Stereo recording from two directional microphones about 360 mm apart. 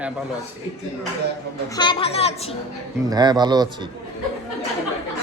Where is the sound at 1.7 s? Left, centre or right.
Centre.